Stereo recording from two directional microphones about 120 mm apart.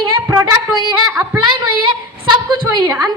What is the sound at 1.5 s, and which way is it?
A woman's voice, 40° right (ahead or behind).